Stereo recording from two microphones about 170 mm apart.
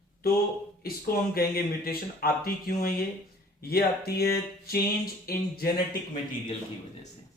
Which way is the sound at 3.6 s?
65° left (ahead or behind).